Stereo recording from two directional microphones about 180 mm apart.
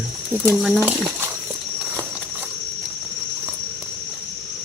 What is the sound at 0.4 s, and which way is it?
Cricket, 5° right (ahead or behind).